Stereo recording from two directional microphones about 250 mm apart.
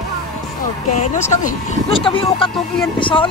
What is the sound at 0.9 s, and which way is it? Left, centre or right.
Speech, left.